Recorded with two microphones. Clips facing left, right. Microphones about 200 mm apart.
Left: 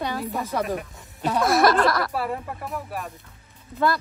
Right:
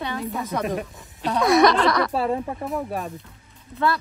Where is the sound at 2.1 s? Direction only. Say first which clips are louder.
Right 4 dB; 25° right (ahead or behind).